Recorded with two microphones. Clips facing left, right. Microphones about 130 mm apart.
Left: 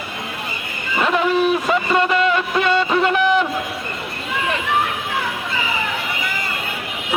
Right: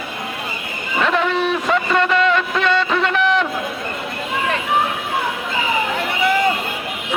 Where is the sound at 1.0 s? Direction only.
5° left (ahead or behind).